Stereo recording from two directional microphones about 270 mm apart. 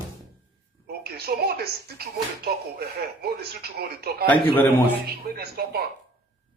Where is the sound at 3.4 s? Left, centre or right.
Right.